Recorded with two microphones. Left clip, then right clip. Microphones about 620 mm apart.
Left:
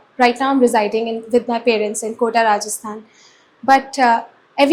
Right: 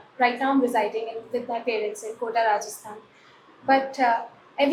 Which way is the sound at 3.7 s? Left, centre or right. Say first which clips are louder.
Left 8 dB; left.